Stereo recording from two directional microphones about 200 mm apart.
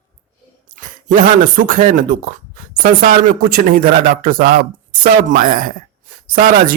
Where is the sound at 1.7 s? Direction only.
40° right (ahead or behind).